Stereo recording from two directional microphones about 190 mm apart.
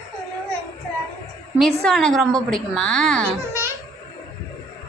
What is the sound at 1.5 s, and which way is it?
A woman's voice, centre (ahead or behind).